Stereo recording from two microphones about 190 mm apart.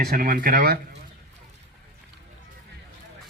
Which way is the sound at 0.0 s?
50° right (ahead or behind).